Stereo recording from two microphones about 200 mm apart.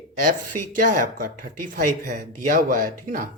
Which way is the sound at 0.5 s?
40° right (ahead or behind).